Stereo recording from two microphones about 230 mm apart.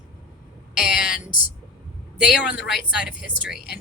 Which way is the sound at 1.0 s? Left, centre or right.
Centre.